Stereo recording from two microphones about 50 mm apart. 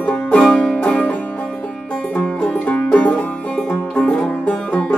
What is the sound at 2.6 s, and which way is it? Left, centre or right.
Banjo, left.